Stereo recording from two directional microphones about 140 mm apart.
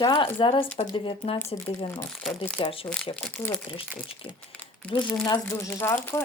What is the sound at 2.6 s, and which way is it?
Speech, 35° left (ahead or behind).